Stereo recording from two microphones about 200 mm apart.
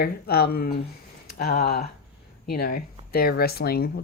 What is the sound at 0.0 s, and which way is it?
Speech, 50° left (ahead or behind).